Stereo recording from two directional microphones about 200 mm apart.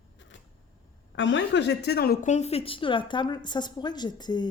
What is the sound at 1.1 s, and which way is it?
A woman's voice, 65° left (ahead or behind).